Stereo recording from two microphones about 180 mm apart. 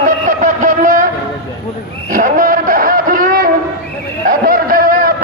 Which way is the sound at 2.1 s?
50° right (ahead or behind).